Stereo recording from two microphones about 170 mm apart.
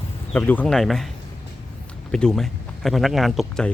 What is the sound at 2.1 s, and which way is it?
Speech, 5° left (ahead or behind).